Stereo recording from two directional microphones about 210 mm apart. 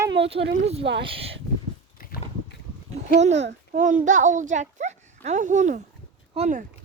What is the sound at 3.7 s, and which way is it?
A child's voice, 35° right (ahead or behind).